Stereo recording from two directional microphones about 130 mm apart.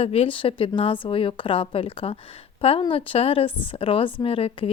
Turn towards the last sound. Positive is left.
turn(degrees=45)  # may be behind; listen again after turning